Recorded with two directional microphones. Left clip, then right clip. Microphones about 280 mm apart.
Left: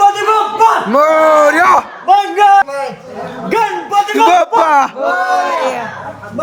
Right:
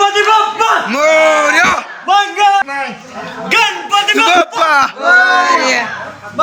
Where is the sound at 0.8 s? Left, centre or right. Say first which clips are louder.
Left 1 dB; left.